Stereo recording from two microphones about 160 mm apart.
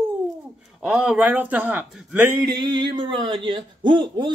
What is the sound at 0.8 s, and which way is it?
Speech, 5° right (ahead or behind).